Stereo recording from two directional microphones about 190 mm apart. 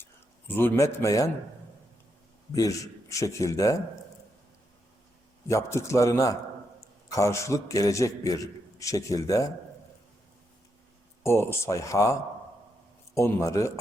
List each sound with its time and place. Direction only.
0.0 s a man's voice: 10° left (ahead or behind)
2.5 s a man's voice: 20° left (ahead or behind)
5.5 s a man's voice: 15° left (ahead or behind)
11.2 s a man's voice: 15° left (ahead or behind)
13.1 s a man's voice: 15° left (ahead or behind)